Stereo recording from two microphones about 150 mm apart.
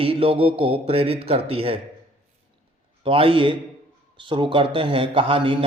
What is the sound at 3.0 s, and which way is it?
Speech, 35° right (ahead or behind).